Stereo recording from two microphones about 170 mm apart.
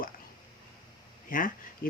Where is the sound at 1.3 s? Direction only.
55° left (ahead or behind).